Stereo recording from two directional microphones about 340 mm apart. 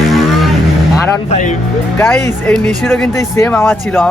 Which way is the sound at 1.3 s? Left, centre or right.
Left.